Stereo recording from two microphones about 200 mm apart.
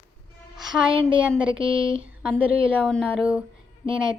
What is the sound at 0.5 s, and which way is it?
Music, centre (ahead or behind).